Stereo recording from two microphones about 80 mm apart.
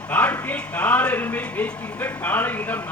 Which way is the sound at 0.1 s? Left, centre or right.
Centre.